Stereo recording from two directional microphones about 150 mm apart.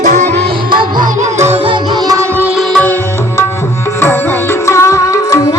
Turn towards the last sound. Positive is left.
turn(degrees=20)  # may be behind; listen again after turning